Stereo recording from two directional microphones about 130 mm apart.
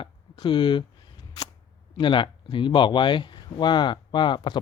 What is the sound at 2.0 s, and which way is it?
Speech, 40° left (ahead or behind).